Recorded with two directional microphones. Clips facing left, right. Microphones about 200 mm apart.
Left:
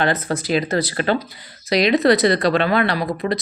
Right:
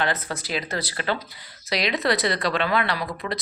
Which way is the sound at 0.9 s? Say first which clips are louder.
Left 7 dB; 50° left (ahead or behind).